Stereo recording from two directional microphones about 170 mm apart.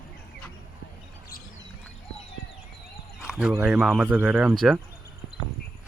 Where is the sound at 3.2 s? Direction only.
5° right (ahead or behind).